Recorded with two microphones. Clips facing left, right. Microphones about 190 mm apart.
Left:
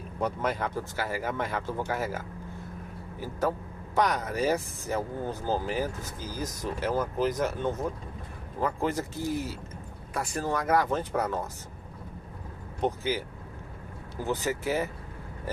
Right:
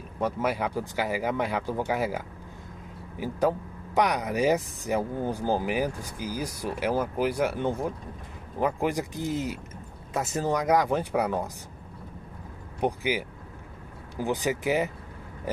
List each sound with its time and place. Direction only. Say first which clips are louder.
0.2 s speech: right 2 dB; 10° right (ahead or behind)
12.8 s speech: right 2 dB; 15° right (ahead or behind)